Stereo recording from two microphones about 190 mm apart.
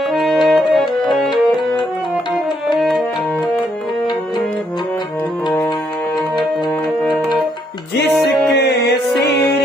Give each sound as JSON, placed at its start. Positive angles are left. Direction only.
{"t": 0.1, "sound": "music", "side_deg": 0}
{"t": 2.7, "sound": "music", "side_deg": 0}
{"t": 8.5, "sound": "music", "side_deg": 60}